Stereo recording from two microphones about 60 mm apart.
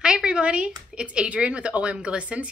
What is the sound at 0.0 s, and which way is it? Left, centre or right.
Speech, centre.